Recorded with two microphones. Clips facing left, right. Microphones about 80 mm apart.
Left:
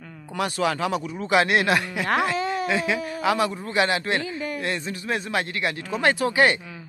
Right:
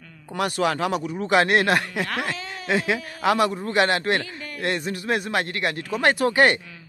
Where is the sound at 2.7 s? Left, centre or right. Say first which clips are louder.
Right 1 dB; right.